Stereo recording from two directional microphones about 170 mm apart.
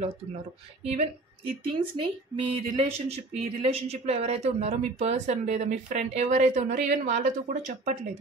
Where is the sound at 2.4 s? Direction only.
35° right (ahead or behind).